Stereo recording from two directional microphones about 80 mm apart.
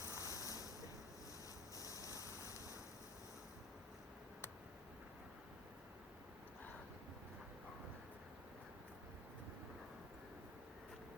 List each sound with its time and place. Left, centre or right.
0.0 s ocean: left
1.8 s waves: left